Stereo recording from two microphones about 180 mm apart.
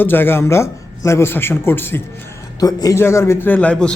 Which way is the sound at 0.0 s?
10° left (ahead or behind).